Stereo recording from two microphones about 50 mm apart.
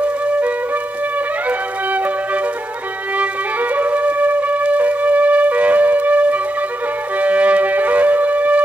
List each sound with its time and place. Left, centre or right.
3.7 s music: right
7.2 s wind instrument: right